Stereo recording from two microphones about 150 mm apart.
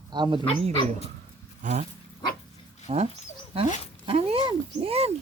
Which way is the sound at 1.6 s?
55° right (ahead or behind).